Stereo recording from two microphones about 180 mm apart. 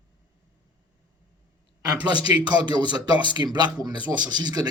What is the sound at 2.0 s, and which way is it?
A man's voice, 25° right (ahead or behind).